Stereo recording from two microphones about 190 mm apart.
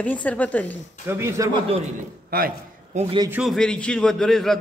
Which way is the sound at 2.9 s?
25° right (ahead or behind).